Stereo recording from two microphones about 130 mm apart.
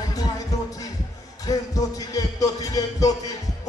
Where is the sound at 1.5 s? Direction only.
30° left (ahead or behind).